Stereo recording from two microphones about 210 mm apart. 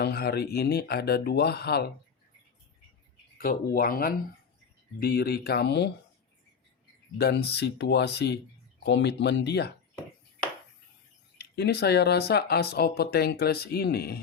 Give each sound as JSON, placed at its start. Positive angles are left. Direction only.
{"t": 0.0, "sound": "speech", "side_deg": 50}
{"t": 3.3, "sound": "speech", "side_deg": 45}
{"t": 7.2, "sound": "speech", "side_deg": 50}
{"t": 11.3, "sound": "speech", "side_deg": 50}